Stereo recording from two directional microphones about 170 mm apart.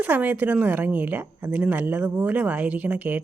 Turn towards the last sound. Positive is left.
turn(degrees=-10)  # may be behind; listen again after turning